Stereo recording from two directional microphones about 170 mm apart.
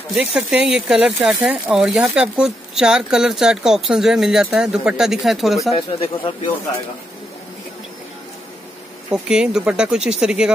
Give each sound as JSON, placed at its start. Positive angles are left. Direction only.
{"t": 0.1, "sound": "speech", "side_deg": -5}
{"t": 5.8, "sound": "speech", "side_deg": 30}
{"t": 9.1, "sound": "speech", "side_deg": -5}